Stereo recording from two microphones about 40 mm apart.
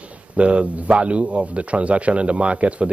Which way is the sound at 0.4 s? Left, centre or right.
Right.